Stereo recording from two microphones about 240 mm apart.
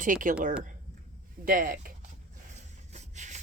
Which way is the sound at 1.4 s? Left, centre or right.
Right.